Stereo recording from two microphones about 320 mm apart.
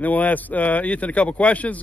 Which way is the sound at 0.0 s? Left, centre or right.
Centre.